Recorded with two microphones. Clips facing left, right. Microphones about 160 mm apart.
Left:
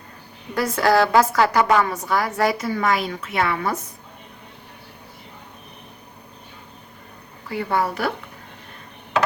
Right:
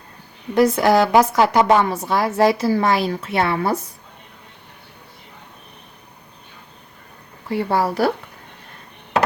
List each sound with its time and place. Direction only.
0.5 s a woman's voice: 20° right (ahead or behind)
7.5 s a woman's voice: 35° right (ahead or behind)